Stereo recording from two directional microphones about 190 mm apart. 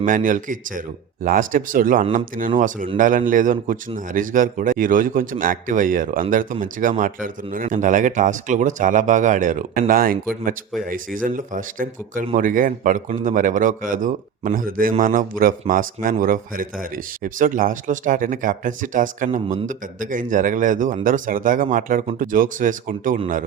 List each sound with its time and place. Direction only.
0.0 s a man's voice: 45° right (ahead or behind)